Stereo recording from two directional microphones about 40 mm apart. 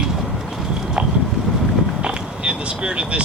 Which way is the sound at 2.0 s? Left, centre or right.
Right.